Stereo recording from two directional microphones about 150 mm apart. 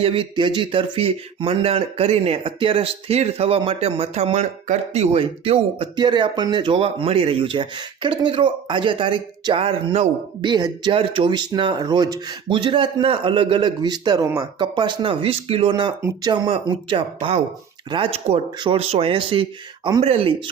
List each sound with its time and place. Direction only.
0.0 s speech: 35° right (ahead or behind)
10.4 s speech: 30° right (ahead or behind)